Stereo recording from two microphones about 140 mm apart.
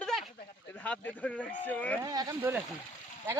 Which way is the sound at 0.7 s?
10° left (ahead or behind).